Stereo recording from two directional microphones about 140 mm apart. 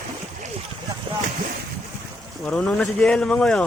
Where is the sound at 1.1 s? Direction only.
35° right (ahead or behind).